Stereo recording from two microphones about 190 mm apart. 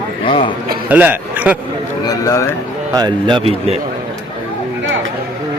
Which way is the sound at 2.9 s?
25° right (ahead or behind).